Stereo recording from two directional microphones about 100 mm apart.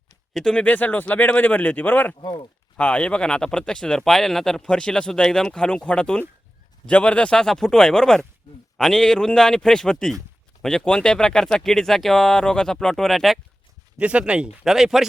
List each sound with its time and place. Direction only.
0.3 s speech: 10° left (ahead or behind)
14.0 s speech: 10° right (ahead or behind)